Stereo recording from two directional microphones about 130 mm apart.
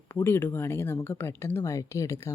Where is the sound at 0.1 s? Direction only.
20° left (ahead or behind).